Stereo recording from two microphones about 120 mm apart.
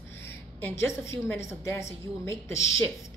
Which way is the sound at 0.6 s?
20° left (ahead or behind).